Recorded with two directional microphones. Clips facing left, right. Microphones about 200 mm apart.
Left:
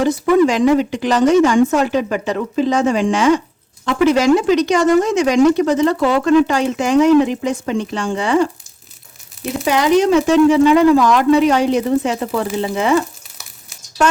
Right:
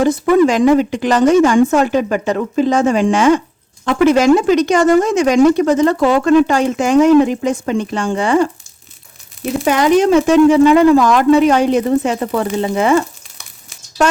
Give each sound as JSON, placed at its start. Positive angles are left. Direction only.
{"t": 0.0, "sound": "speech", "side_deg": -50}
{"t": 9.6, "sound": "speech", "side_deg": -50}